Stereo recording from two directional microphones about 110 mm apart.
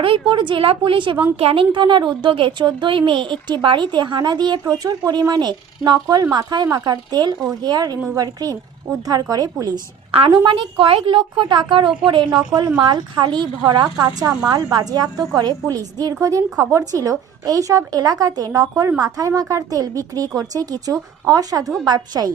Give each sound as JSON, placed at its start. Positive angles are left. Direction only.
{"t": 0.0, "sound": "speech", "side_deg": -50}
{"t": 1.4, "sound": "a woman's voice", "side_deg": -60}
{"t": 1.7, "sound": "a woman's voice", "side_deg": -45}
{"t": 10.1, "sound": "a woman's voice", "side_deg": -55}